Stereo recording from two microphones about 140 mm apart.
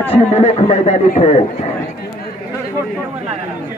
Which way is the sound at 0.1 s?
50° left (ahead or behind).